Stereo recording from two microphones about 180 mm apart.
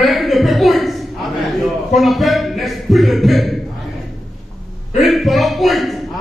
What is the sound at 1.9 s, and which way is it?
Speech, centre (ahead or behind).